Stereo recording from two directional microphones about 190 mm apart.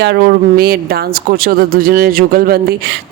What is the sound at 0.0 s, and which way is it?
Speech, 55° right (ahead or behind).